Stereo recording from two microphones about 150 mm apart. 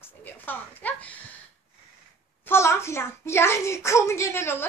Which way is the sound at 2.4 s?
15° left (ahead or behind).